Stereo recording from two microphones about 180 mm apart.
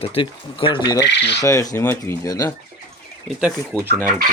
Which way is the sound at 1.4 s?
20° left (ahead or behind).